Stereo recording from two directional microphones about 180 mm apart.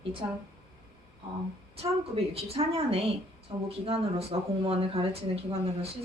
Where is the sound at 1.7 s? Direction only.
35° right (ahead or behind).